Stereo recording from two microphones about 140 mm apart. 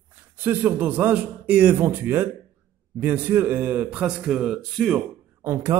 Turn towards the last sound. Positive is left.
turn(degrees=-20)  # may be behind; listen again after turning